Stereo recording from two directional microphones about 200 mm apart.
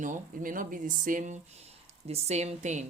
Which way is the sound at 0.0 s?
40° right (ahead or behind).